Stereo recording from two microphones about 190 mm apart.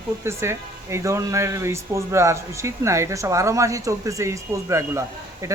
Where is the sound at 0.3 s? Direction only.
15° right (ahead or behind).